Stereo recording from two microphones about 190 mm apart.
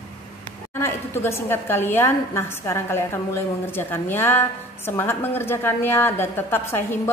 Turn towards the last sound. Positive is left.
turn(degrees=10)  # may be behind; listen again after turning